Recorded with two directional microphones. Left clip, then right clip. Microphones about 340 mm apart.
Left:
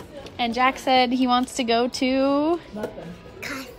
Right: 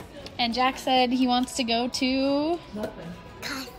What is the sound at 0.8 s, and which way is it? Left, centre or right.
A woman's voice, right.